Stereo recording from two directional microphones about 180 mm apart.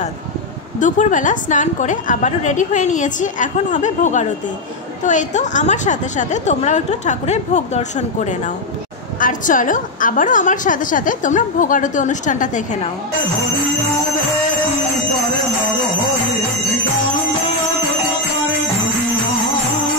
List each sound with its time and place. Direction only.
0.7 s a woman's voice: 45° left (ahead or behind)